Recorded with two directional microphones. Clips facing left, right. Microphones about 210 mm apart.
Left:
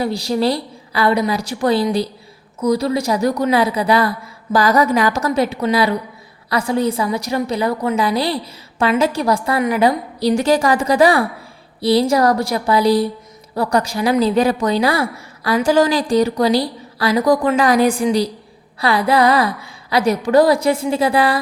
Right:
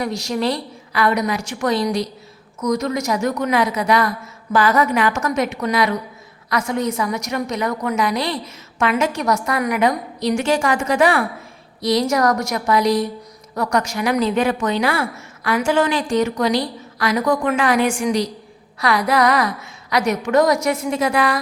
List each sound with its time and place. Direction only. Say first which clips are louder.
0.0 s a woman's voice: left 3 dB; 35° left (ahead or behind)